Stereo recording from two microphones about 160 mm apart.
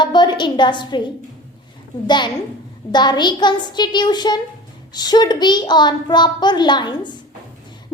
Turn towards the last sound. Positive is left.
turn(degrees=30)  # may be behind; listen again after turning